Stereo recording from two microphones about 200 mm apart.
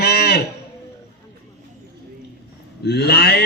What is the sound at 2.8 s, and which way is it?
Speech, 55° left (ahead or behind).